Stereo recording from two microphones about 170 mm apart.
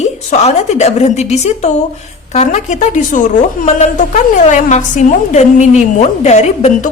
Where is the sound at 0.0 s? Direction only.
40° left (ahead or behind).